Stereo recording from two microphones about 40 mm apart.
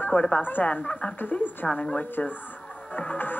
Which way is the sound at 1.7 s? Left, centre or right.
Left.